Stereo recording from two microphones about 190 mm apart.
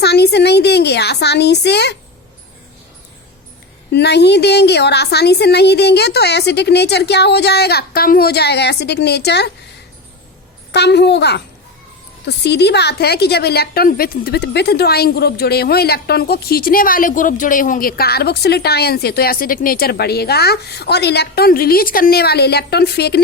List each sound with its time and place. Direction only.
0.0 s a sound: 60° left (ahead or behind)
3.9 s a woman's voice: 60° left (ahead or behind)
10.7 s a woman's voice: 60° left (ahead or behind)